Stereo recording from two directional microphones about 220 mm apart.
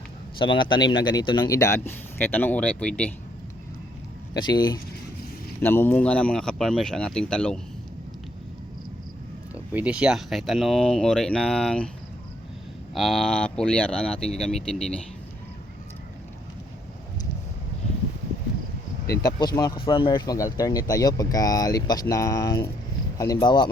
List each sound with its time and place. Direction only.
0.3 s a man's voice: 20° left (ahead or behind); by 3.1 s 5° left (ahead or behind)
4.4 s speech: 20° left (ahead or behind); by 7.6 s 5° left (ahead or behind)
9.7 s speech: 5° right (ahead or behind)
12.9 s speech: centre (ahead or behind)
19.2 s a man's voice: 20° left (ahead or behind)